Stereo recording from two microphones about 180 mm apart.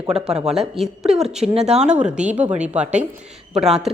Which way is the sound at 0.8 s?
Centre (ahead or behind).